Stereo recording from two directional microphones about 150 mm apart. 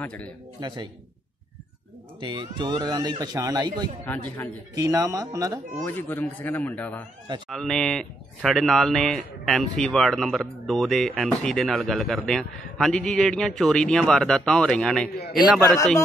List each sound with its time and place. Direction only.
0.0 s a man's voice: 10° left (ahead or behind)
0.6 s speech: 30° right (ahead or behind)
2.1 s speech: 30° right (ahead or behind)
4.0 s a man's voice: 10° left (ahead or behind)
4.7 s speech: 20° right (ahead or behind)
5.9 s a man's voice: 15° left (ahead or behind)